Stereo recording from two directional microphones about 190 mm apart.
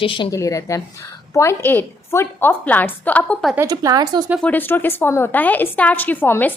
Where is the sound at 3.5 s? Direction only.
15° right (ahead or behind).